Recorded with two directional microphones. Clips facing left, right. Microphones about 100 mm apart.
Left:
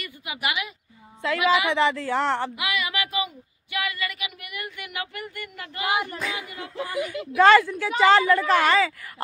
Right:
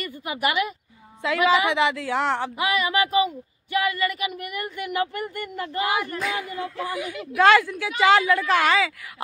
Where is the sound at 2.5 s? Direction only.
35° right (ahead or behind).